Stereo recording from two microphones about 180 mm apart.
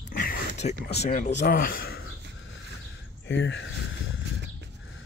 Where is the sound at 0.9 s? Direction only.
35° left (ahead or behind); by 2.0 s 55° left (ahead or behind).